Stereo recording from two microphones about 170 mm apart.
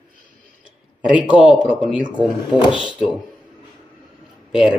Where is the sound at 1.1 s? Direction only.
5° right (ahead or behind).